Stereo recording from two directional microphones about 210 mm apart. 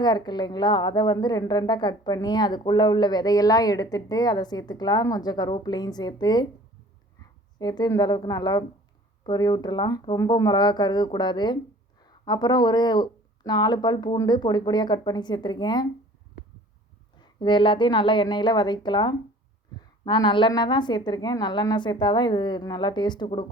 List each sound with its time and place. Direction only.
0.0 s a woman's voice: 20° left (ahead or behind)
17.2 s a woman's voice: 20° left (ahead or behind)